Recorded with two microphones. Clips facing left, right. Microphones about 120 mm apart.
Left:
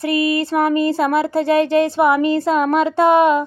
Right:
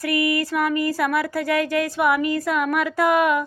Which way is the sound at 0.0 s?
25° left (ahead or behind).